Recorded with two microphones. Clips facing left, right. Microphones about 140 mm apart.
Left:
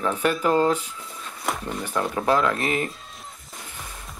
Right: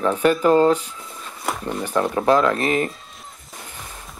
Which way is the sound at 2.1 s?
30° right (ahead or behind).